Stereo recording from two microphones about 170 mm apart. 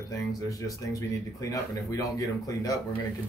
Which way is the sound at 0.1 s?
20° left (ahead or behind).